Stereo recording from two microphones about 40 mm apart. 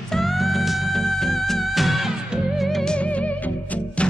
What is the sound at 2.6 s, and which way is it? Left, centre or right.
Music, centre.